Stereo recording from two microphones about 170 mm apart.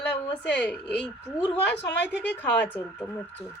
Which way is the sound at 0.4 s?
90° left.